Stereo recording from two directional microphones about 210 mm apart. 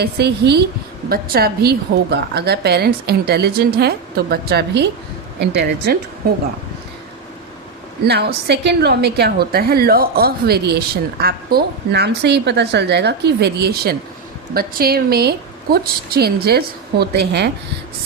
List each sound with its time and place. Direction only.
0.0 s a woman's voice: 50° right (ahead or behind)
8.0 s a woman's voice: 50° right (ahead or behind)